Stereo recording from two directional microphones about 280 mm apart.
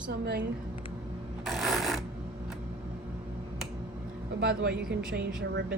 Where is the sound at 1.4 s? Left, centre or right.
Centre.